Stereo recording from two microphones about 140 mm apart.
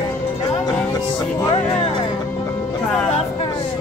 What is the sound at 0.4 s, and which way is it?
Music, 25° left (ahead or behind).